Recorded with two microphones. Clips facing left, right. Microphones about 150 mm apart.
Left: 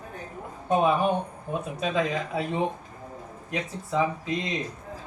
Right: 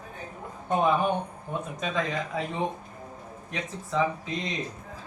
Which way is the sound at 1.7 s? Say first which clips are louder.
Left 3 dB; 10° left (ahead or behind).